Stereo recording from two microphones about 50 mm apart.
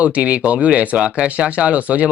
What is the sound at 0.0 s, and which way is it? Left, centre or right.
Speech, right.